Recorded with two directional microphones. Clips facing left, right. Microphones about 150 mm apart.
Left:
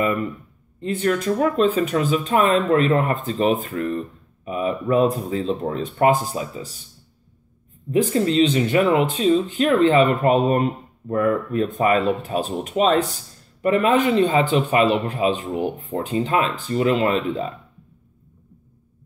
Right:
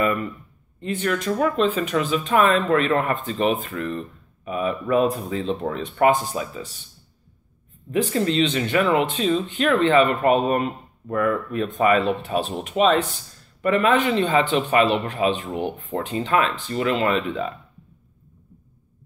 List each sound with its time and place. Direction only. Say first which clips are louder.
0.0 s speech: left 1 dB; 30° left (ahead or behind)
8.1 s speech: left 3 dB; 35° left (ahead or behind)
15.9 s speech: right 1 dB; 15° left (ahead or behind)
16.3 s speech: even; 35° left (ahead or behind)